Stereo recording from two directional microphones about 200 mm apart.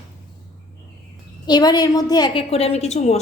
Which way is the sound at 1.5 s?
20° left (ahead or behind).